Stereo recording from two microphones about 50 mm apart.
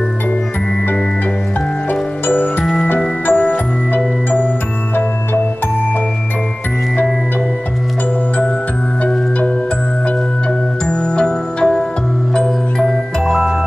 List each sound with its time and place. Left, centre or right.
1.9 s music: left
10.9 s music: centre
13.2 s music: centre